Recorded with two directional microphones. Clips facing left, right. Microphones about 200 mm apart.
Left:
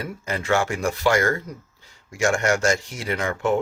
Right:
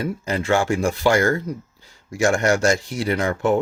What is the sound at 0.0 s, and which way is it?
Speech, 30° right (ahead or behind).